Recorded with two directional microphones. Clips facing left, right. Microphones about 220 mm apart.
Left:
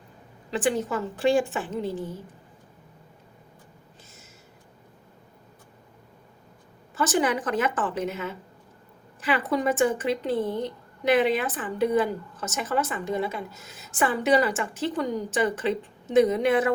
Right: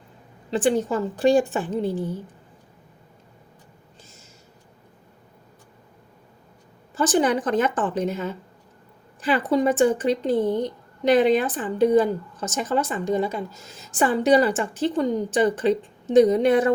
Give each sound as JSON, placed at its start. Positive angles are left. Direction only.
{"t": 0.5, "sound": "a woman's voice", "side_deg": -30}
{"t": 6.9, "sound": "a woman's voice", "side_deg": -30}